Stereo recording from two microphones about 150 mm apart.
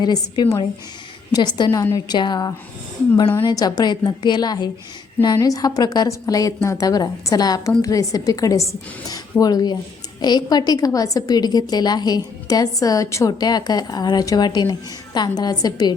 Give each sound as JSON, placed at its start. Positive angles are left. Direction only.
{"t": 0.0, "sound": "a woman's voice", "side_deg": 30}